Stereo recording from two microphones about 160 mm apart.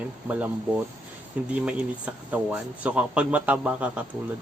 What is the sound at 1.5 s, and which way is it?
Speech, 5° right (ahead or behind).